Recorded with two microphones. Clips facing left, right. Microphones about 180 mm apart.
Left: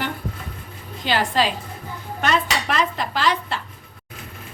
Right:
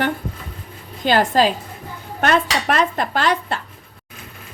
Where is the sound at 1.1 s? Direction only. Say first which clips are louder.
Right 5 dB; 45° right (ahead or behind).